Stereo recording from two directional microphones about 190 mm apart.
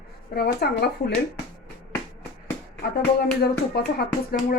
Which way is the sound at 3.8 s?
55° left (ahead or behind).